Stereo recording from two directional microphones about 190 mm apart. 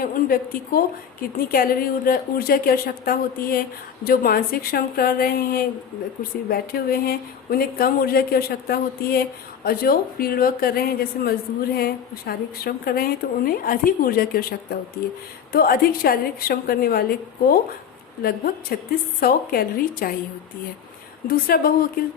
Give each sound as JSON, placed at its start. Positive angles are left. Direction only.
{"t": 0.0, "sound": "a woman's voice", "side_deg": 50}
{"t": 21.2, "sound": "a woman's voice", "side_deg": 50}